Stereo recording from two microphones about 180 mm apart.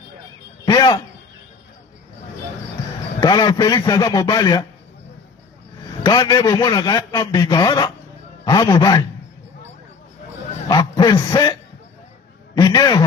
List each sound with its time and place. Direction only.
0.7 s a sound: 20° left (ahead or behind)
3.2 s a man's voice: 25° left (ahead or behind)
6.0 s a man's voice: 20° left (ahead or behind)
10.7 s speech: 20° left (ahead or behind)
12.5 s a man's voice: 20° left (ahead or behind)